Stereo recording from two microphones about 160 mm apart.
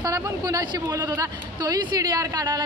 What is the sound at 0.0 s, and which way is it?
Speech, 20° right (ahead or behind).